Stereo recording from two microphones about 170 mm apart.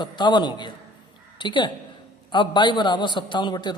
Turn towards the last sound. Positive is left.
turn(degrees=25)  # may be behind; listen again after turning